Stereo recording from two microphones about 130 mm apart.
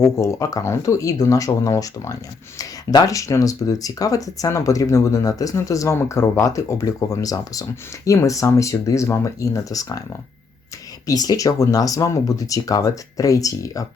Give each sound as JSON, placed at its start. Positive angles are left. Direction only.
{"t": 0.0, "sound": "speech", "side_deg": 25}